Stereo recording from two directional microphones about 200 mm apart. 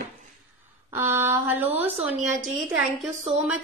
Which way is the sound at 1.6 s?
30° right (ahead or behind).